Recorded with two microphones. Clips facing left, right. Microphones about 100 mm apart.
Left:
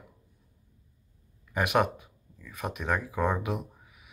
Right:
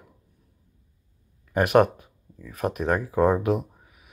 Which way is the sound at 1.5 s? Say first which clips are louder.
Right 7 dB; 45° right (ahead or behind).